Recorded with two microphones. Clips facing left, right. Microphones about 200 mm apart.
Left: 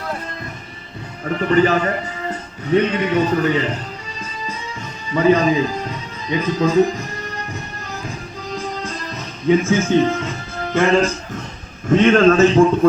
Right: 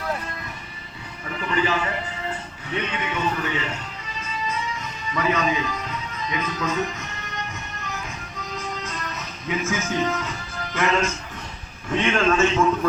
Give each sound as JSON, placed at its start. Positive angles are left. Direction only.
{"t": 1.2, "sound": "speech", "side_deg": 45}
{"t": 4.2, "sound": "music", "side_deg": 30}
{"t": 11.9, "sound": "a man's voice", "side_deg": 45}